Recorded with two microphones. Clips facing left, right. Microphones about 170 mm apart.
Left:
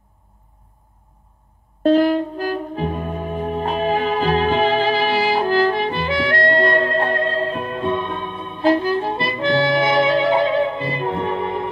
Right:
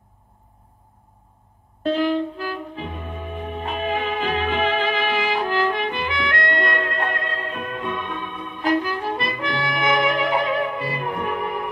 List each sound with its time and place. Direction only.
1.8 s music: 40° left (ahead or behind)